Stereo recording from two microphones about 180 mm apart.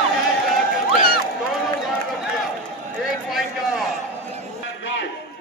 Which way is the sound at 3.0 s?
Centre (ahead or behind).